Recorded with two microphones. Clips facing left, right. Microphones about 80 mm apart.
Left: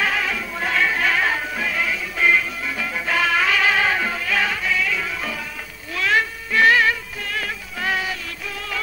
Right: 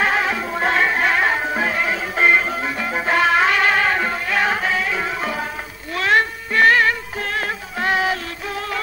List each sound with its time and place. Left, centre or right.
0.0 s music: right
4.5 s music: right
5.9 s music: right
6.5 s music: right
7.2 s music: right
7.9 s music: right